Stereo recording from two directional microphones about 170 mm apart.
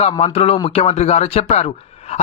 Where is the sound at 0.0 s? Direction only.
35° left (ahead or behind).